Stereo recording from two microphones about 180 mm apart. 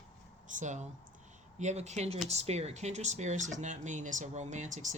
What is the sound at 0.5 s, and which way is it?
Speech, 45° right (ahead or behind).